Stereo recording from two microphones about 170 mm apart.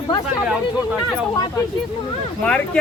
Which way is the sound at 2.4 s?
5° left (ahead or behind).